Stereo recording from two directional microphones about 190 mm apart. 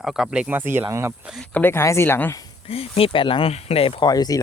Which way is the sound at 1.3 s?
5° left (ahead or behind).